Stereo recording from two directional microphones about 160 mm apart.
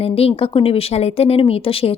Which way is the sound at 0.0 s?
35° left (ahead or behind).